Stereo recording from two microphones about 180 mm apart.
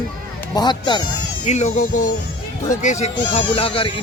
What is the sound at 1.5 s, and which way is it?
Speech, 40° left (ahead or behind).